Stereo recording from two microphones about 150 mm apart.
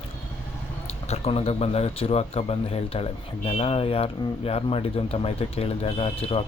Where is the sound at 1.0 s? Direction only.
40° left (ahead or behind).